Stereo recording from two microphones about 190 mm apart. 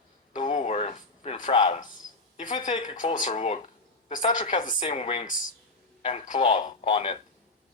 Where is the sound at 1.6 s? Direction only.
40° left (ahead or behind).